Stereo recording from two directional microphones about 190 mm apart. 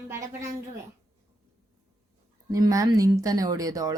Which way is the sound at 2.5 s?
20° right (ahead or behind).